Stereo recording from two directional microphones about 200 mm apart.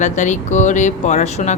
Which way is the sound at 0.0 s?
35° left (ahead or behind).